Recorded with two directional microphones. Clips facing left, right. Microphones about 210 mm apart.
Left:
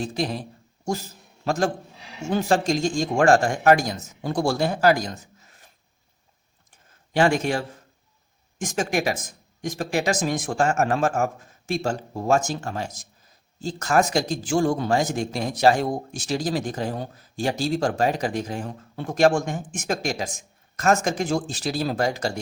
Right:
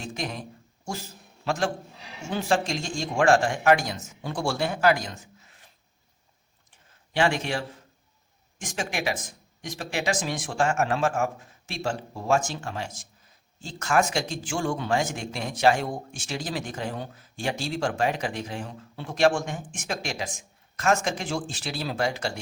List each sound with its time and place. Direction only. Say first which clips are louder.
0.0 s speech: left 7 dB; 35° left (ahead or behind)
1.5 s speech: left 4 dB; 40° left (ahead or behind)
7.1 s speech: left 4 dB; 45° left (ahead or behind)